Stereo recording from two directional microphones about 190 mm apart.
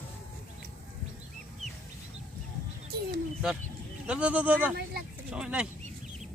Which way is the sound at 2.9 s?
55° right (ahead or behind).